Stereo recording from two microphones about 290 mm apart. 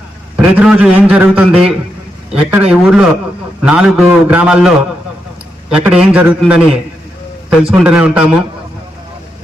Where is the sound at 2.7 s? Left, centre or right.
Centre.